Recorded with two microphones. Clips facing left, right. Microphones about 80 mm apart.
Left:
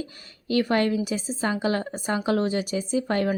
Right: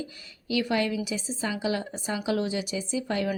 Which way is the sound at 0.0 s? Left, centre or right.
Left.